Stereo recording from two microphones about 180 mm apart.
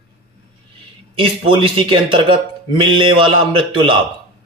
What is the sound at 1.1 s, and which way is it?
Speech, 30° right (ahead or behind).